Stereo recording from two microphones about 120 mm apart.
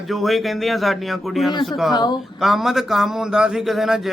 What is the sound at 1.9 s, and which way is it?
Speech, 35° left (ahead or behind).